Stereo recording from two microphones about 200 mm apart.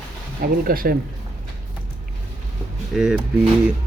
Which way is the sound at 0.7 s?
45° right (ahead or behind).